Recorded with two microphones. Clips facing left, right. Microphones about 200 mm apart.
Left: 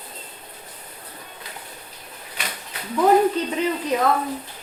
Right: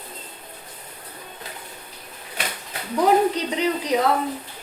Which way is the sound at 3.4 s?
20° right (ahead or behind).